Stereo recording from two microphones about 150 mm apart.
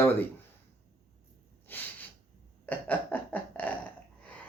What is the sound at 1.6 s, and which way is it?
Snort, 10° left (ahead or behind).